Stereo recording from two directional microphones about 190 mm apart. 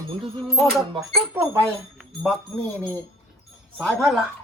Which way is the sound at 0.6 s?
Centre (ahead or behind).